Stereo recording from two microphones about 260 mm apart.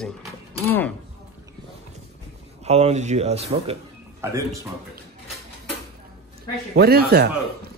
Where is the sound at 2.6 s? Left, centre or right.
Right.